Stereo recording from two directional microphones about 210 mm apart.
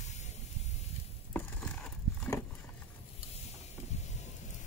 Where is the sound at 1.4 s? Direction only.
5° left (ahead or behind).